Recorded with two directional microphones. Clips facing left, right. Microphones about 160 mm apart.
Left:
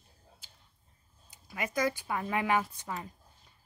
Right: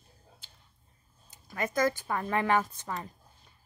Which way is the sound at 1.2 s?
10° left (ahead or behind).